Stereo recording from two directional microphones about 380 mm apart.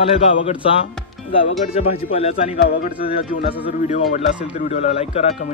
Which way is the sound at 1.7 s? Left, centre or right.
Centre.